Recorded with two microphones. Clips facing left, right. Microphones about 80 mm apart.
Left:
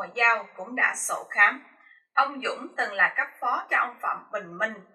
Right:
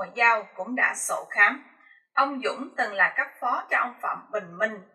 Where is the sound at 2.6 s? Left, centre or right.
Centre.